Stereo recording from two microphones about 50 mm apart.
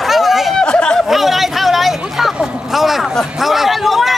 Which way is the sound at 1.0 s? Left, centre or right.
Centre.